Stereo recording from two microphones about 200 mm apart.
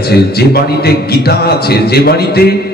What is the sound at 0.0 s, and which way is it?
A man's voice, 55° left (ahead or behind).